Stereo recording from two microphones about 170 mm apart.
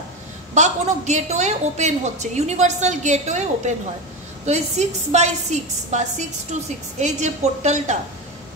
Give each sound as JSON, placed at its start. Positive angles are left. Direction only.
{"t": 0.6, "sound": "a woman's voice", "side_deg": -45}